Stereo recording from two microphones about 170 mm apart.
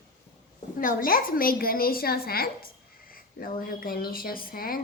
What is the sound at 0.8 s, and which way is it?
Speech, 55° left (ahead or behind).